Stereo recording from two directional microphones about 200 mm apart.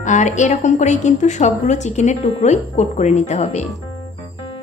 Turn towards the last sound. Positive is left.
turn(degrees=35)  # may be behind; listen again after turning